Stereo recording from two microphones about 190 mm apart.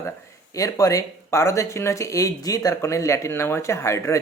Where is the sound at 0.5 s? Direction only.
20° left (ahead or behind).